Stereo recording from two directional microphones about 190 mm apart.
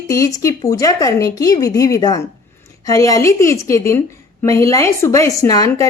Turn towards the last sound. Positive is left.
turn(degrees=20)  # may be behind; listen again after turning